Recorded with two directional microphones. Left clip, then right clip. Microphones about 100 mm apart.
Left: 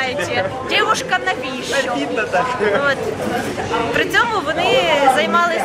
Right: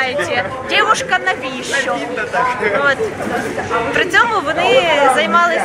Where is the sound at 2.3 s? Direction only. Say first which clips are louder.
Right 2 dB; 35° left (ahead or behind).